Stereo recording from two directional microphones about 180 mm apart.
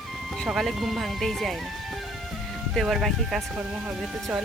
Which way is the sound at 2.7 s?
Centre (ahead or behind).